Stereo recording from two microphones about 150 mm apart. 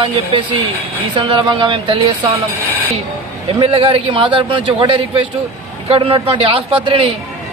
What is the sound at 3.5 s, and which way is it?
A man's voice, 35° right (ahead or behind).